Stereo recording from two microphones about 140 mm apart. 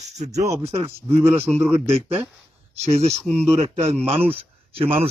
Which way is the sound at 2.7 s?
50° right (ahead or behind).